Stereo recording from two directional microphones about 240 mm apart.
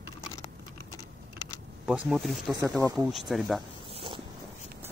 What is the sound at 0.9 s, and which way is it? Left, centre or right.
Typing, centre.